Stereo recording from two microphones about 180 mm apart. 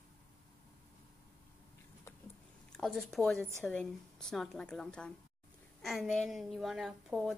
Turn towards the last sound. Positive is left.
turn(degrees=0)  # may be behind; listen again after turning